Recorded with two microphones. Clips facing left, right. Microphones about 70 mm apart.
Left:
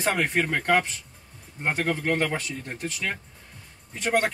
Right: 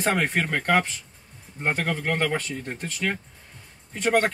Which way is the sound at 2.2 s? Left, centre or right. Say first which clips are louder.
Right 2 dB; centre.